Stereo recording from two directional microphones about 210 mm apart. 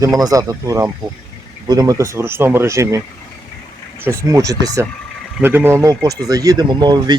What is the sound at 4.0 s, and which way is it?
Speech, 15° right (ahead or behind).